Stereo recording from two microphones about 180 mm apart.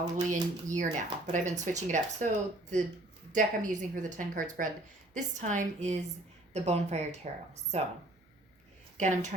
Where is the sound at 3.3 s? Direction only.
45° right (ahead or behind).